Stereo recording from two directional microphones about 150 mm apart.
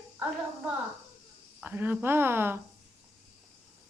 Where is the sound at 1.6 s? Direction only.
10° right (ahead or behind).